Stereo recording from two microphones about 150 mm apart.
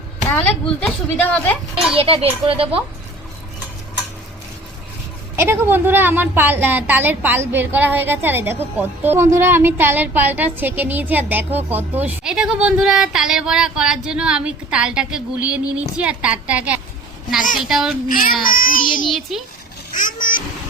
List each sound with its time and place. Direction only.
0.3 s a woman's voice: 10° left (ahead or behind)
2.0 s speech: 40° right (ahead or behind)
5.4 s a woman's voice: 15° right (ahead or behind)
18.5 s child singing: 70° left (ahead or behind)
19.0 s a child's voice: centre (ahead or behind)
19.9 s a sound: 60° left (ahead or behind)